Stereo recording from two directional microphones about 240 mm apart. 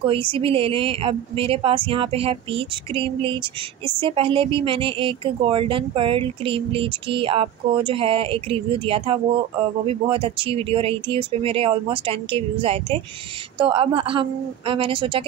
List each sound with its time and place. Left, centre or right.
0.0 s speech: right